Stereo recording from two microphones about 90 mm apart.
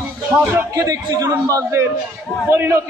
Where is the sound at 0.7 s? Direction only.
40° right (ahead or behind).